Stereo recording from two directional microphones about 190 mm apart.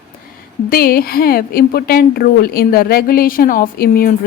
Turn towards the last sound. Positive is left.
turn(degrees=50)  # may be behind; listen again after turning